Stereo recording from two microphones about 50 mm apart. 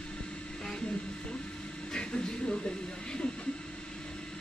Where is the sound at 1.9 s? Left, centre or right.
Centre.